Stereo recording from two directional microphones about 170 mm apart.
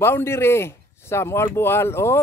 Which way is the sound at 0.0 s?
15° left (ahead or behind).